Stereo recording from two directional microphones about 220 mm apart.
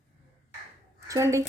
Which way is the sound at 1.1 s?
15° right (ahead or behind).